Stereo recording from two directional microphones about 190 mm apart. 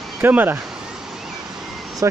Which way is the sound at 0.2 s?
10° right (ahead or behind).